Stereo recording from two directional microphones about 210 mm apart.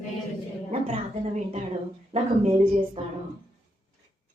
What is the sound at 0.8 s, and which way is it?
A woman's voice, 30° right (ahead or behind).